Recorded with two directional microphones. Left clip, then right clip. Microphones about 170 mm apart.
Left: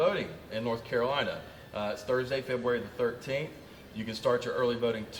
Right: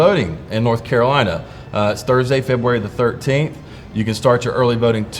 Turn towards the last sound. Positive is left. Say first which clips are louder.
# right 14 dB
turn(degrees=-40)  # may be behind; listen again after turning